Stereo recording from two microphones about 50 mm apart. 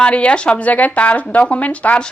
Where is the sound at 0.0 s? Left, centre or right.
Left.